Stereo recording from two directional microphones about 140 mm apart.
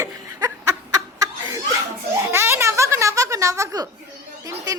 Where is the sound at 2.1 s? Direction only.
15° right (ahead or behind).